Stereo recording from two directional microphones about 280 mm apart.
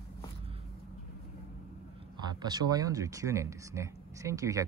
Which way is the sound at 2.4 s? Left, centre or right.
Centre.